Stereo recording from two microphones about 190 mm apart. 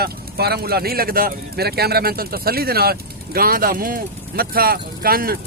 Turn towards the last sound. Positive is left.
turn(degrees=-50)  # may be behind; listen again after turning